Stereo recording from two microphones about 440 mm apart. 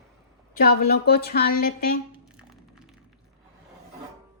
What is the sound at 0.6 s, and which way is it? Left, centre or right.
Speech, left.